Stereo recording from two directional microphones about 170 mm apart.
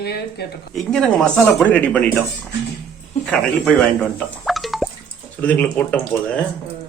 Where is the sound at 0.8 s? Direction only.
5° left (ahead or behind).